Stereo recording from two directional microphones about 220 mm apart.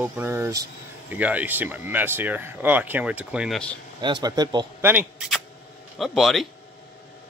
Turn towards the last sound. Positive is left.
turn(degrees=0)  # may be behind; listen again after turning